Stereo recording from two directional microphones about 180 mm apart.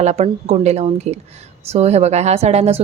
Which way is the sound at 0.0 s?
40° right (ahead or behind).